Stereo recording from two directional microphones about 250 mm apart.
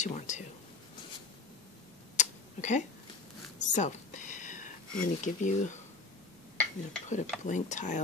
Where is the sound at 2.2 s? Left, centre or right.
Left.